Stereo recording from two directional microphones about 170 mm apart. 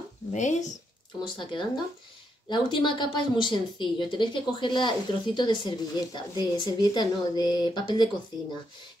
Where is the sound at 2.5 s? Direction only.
25° left (ahead or behind).